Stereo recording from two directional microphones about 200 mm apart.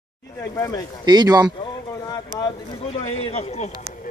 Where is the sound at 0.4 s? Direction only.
15° left (ahead or behind).